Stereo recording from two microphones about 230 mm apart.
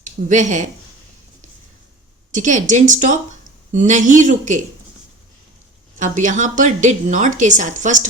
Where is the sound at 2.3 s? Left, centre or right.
Right.